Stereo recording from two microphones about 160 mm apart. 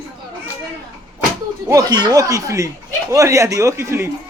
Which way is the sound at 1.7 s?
25° right (ahead or behind).